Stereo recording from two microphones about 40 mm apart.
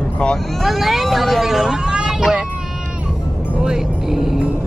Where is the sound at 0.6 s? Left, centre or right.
Centre.